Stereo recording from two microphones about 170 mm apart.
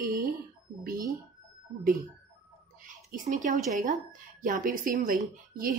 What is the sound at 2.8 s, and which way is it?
A woman's voice, 50° right (ahead or behind).